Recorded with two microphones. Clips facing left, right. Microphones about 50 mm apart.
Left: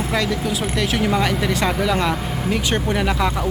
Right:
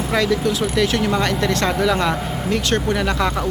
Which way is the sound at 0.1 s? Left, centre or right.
Centre.